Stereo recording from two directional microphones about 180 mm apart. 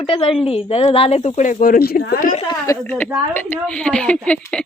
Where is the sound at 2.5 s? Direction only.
15° left (ahead or behind).